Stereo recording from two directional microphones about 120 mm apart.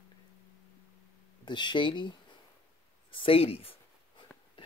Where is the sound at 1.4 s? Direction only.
40° left (ahead or behind).